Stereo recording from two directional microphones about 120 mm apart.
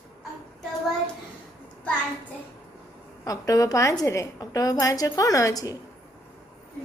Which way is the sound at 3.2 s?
30° left (ahead or behind).